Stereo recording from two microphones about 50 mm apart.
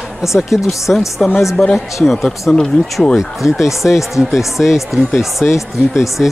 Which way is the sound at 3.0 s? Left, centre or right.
Centre.